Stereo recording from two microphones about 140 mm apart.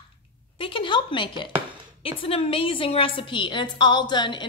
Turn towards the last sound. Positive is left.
turn(degrees=35)  # may be behind; listen again after turning